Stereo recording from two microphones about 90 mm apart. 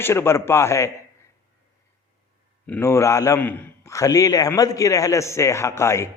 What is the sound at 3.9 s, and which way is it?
A man's voice, 35° left (ahead or behind).